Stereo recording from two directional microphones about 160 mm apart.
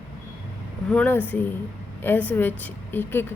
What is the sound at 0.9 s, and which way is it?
A woman's voice, 10° left (ahead or behind).